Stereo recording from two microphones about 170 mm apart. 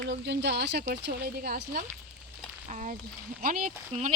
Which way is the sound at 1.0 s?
65° right (ahead or behind).